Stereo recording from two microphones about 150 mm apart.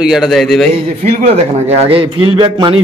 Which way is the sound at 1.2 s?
45° right (ahead or behind).